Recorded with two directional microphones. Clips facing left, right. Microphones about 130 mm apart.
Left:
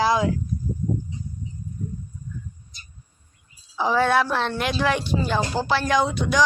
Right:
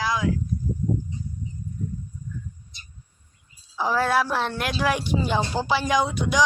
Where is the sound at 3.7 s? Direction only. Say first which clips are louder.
Left 2 dB; 5° right (ahead or behind).